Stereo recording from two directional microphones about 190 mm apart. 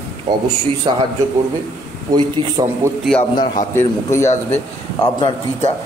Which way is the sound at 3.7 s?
15° left (ahead or behind).